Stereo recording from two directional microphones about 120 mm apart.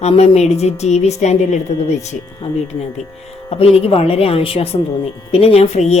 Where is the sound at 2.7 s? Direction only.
65° left (ahead or behind).